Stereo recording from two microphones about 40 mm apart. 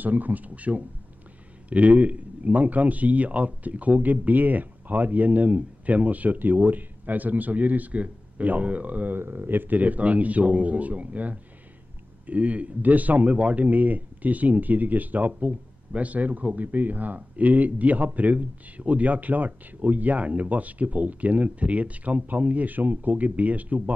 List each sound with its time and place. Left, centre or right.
0.0 s speech: right
9.1 s speech: right